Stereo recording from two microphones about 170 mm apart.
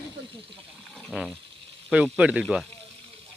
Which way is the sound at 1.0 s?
Centre (ahead or behind).